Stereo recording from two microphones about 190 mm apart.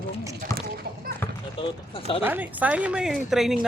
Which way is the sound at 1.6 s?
30° left (ahead or behind).